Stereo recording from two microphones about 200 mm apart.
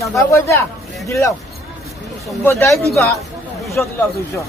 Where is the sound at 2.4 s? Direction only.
10° left (ahead or behind).